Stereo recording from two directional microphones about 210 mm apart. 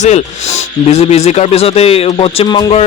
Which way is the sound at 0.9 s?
30° left (ahead or behind).